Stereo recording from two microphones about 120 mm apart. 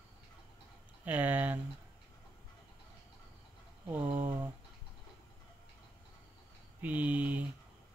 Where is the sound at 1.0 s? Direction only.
15° right (ahead or behind).